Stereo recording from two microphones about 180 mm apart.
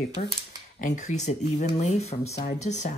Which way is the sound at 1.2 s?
40° left (ahead or behind).